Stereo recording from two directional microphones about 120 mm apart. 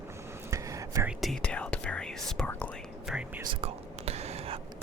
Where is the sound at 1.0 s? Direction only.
Centre (ahead or behind).